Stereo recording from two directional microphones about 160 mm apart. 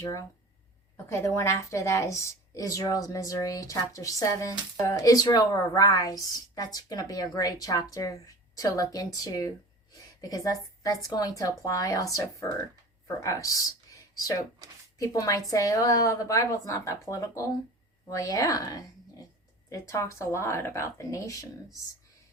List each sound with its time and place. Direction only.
0.0 s a woman's voice: 20° left (ahead or behind)
10.2 s a woman's voice: 20° left (ahead or behind)